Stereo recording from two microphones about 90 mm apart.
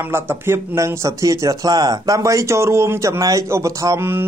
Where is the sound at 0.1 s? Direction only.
30° right (ahead or behind).